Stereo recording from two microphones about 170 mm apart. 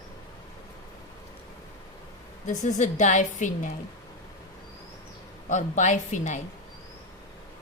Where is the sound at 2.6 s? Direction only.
45° left (ahead or behind).